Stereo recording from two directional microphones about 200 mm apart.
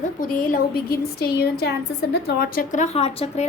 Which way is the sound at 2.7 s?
35° left (ahead or behind).